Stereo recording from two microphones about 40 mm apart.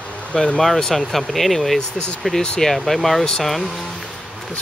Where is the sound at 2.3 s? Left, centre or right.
Left.